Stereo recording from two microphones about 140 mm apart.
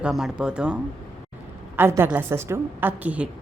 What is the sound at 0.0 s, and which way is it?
Speech, 5° right (ahead or behind).